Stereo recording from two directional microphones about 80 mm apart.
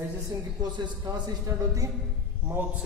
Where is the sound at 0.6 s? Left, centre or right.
Right.